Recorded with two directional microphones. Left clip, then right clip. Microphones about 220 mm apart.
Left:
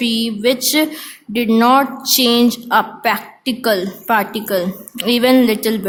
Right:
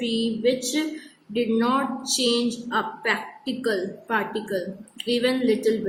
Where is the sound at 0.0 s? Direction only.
45° left (ahead or behind).